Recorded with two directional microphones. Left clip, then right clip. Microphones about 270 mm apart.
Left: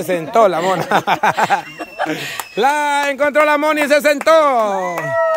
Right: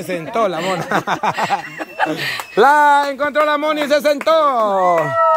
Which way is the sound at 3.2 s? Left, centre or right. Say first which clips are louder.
Left 3 dB; centre.